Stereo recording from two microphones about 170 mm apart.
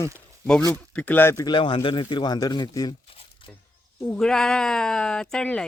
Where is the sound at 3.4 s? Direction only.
30° left (ahead or behind).